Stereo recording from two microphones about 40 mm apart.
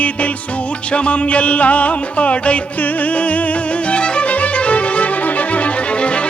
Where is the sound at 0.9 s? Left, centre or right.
Left.